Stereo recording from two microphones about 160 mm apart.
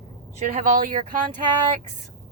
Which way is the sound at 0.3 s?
50° right (ahead or behind).